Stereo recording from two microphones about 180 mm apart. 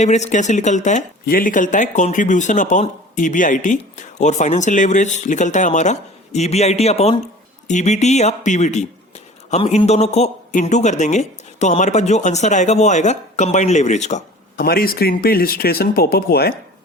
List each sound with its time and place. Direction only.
0.0 s a man's voice: 40° left (ahead or behind)
14.5 s speech: 55° left (ahead or behind)